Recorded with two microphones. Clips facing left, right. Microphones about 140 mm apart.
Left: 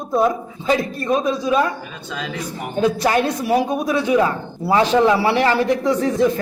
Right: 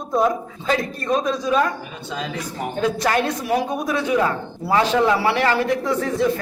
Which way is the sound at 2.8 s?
10° left (ahead or behind).